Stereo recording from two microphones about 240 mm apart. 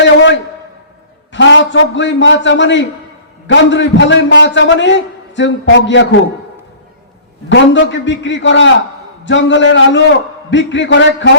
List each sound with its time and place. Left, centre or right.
0.0 s a sound: left
1.3 s a man's voice: left
7.5 s a man's voice: left